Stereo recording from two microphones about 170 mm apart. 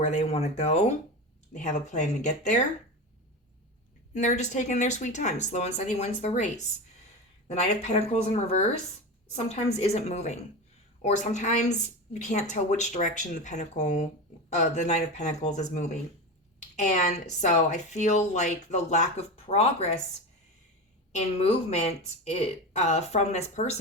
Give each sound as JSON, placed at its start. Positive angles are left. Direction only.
{"t": 0.0, "sound": "speech", "side_deg": 40}
{"t": 4.1, "sound": "speech", "side_deg": 45}
{"t": 21.1, "sound": "speech", "side_deg": 40}